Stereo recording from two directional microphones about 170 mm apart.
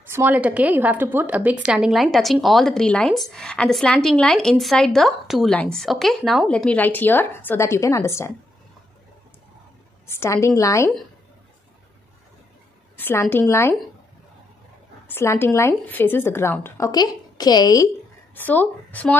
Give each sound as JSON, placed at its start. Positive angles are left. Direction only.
{"t": 0.1, "sound": "a woman's voice", "side_deg": -10}
{"t": 10.0, "sound": "a woman's voice", "side_deg": 15}
{"t": 12.9, "sound": "a woman's voice", "side_deg": 15}
{"t": 15.0, "sound": "a woman's voice", "side_deg": 15}
{"t": 18.3, "sound": "speech", "side_deg": 10}